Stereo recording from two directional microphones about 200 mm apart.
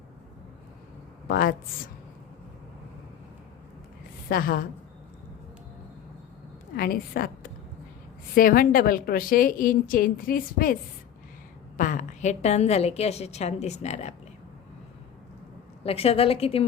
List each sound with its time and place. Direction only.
1.3 s a woman's voice: 45° left (ahead or behind)
4.3 s a woman's voice: 45° left (ahead or behind)
6.7 s a woman's voice: 50° left (ahead or behind)
11.8 s a woman's voice: 40° left (ahead or behind)
15.8 s a woman's voice: 30° left (ahead or behind)